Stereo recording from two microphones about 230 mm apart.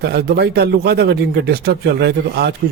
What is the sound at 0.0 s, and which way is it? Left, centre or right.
Speech, right.